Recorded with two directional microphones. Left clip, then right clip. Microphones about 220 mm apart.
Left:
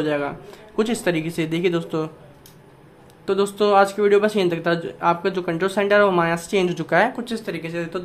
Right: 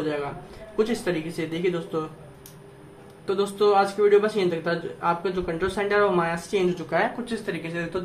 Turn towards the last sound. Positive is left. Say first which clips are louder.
# left 2 dB
turn(degrees=35)  # may be behind; listen again after turning